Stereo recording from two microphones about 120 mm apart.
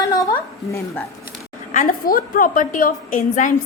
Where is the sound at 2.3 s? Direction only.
90° left.